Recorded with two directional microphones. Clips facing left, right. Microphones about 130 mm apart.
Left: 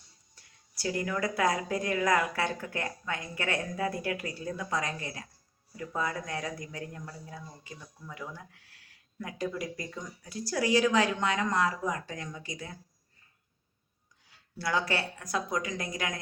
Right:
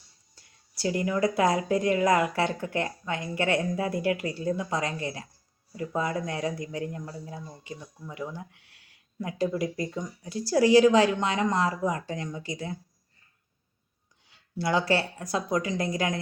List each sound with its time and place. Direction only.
0.8 s speech: 25° right (ahead or behind)
14.3 s speech: 25° right (ahead or behind)